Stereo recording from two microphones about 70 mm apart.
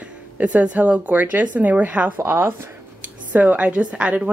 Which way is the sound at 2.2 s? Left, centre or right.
Right.